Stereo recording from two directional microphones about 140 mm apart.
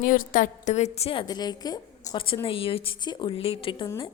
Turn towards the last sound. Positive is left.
turn(degrees=40)  # may be behind; listen again after turning